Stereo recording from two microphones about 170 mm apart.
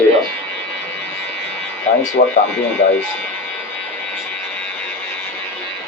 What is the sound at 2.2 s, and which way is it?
Speech, 45° left (ahead or behind).